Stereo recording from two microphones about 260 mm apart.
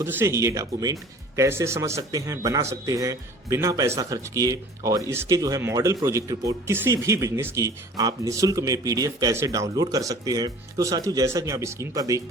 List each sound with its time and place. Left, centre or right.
0.0 s a man's voice: centre